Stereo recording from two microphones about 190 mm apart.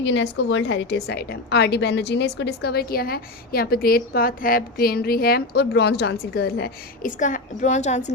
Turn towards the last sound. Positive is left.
turn(degrees=35)  # may be behind; listen again after turning